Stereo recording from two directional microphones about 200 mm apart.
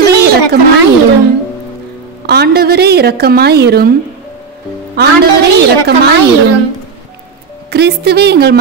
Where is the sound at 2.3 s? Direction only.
50° right (ahead or behind).